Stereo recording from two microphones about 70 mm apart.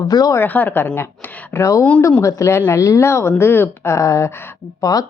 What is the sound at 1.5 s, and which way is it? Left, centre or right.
A woman's voice, left.